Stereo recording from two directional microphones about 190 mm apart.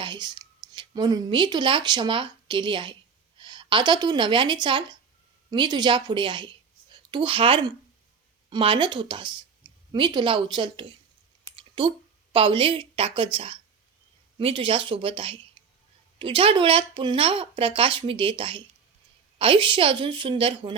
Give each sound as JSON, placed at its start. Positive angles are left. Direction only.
{"t": 0.0, "sound": "speech", "side_deg": -25}
{"t": 15.6, "sound": "a sound", "side_deg": -25}
{"t": 16.1, "sound": "speech", "side_deg": -25}